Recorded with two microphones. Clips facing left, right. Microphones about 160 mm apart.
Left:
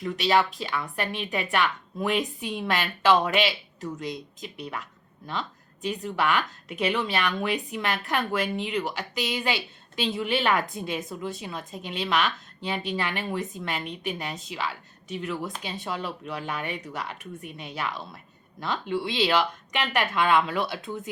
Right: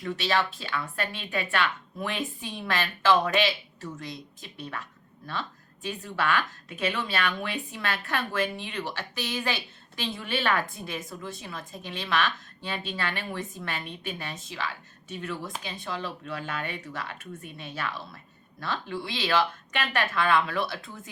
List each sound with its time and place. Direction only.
0.2 s a woman's voice: 15° left (ahead or behind)